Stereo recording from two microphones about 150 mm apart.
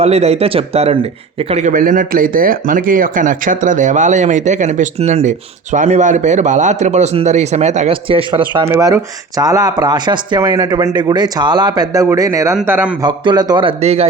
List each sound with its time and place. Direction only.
0.0 s a man's voice: 45° right (ahead or behind)
1.6 s speech: 65° right (ahead or behind); by 7.9 s 50° right (ahead or behind)
8.0 s a man's voice: 35° right (ahead or behind)
8.6 s speech: 20° right (ahead or behind)
12.6 s a man's voice: 10° right (ahead or behind)
13.0 s a man's voice: 30° right (ahead or behind)